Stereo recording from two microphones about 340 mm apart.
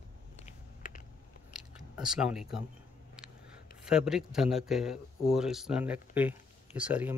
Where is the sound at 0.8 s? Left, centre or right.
Left.